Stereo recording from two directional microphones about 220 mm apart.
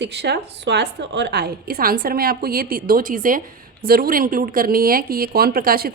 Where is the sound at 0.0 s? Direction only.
50° right (ahead or behind).